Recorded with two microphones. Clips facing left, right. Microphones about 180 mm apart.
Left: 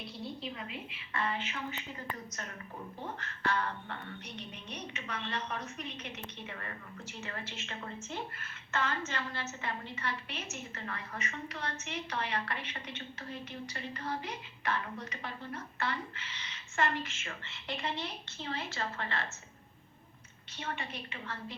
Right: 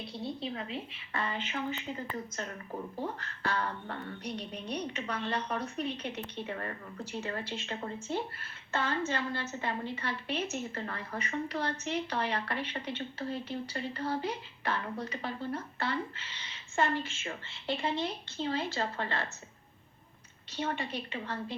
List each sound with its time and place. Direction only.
0.1 s a woman's voice: 30° right (ahead or behind)
3.2 s a woman's voice: 35° right (ahead or behind)
20.6 s a woman's voice: 35° right (ahead or behind)